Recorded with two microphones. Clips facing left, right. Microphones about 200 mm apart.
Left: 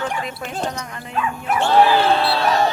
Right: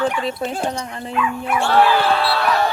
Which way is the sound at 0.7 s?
30° right (ahead or behind).